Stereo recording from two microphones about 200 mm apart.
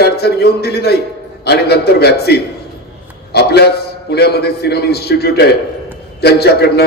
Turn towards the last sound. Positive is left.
turn(degrees=55)  # may be behind; listen again after turning